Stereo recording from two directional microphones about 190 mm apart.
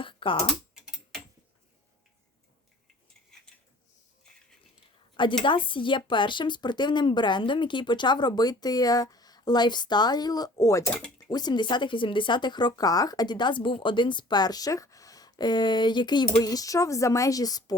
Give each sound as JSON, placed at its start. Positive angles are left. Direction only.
{"t": 0.0, "sound": "typing", "side_deg": 25}
{"t": 0.7, "sound": "typing", "side_deg": 0}
{"t": 5.4, "sound": "speech", "side_deg": 25}
{"t": 10.8, "sound": "speech", "side_deg": 5}
{"t": 11.3, "sound": "speech", "side_deg": 20}